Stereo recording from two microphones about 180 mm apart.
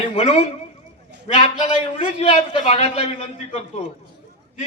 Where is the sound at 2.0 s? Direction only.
30° left (ahead or behind).